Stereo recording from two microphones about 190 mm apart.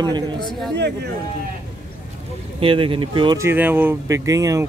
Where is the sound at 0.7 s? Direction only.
65° right (ahead or behind).